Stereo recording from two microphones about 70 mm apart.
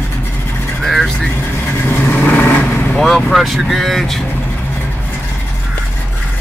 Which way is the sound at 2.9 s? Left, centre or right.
Centre.